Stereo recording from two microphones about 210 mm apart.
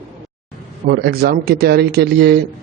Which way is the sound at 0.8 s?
50° right (ahead or behind).